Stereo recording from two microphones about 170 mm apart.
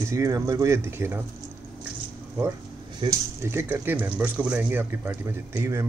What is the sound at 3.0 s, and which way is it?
Speech, 15° right (ahead or behind).